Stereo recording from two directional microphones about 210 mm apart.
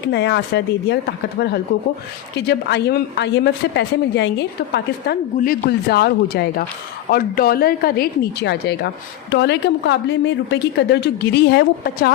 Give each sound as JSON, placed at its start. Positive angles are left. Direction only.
{"t": 0.1, "sound": "speech", "side_deg": 55}
{"t": 2.3, "sound": "a woman's voice", "side_deg": 50}